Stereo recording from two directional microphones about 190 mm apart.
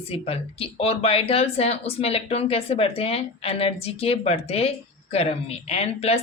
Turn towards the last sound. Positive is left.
turn(degrees=35)  # may be behind; listen again after turning